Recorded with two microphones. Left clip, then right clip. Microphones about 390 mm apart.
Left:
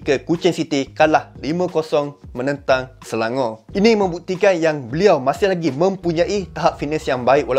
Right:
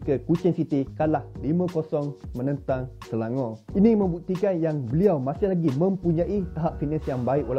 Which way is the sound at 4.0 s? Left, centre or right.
Centre.